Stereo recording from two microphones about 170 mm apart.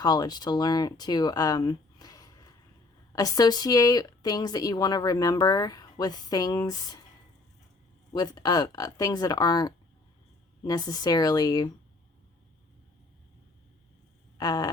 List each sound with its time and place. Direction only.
0.0 s speech: 25° left (ahead or behind)
8.1 s speech: 25° left (ahead or behind)
14.3 s a sound: 25° left (ahead or behind)